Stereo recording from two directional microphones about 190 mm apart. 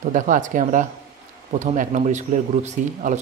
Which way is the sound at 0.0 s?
45° right (ahead or behind).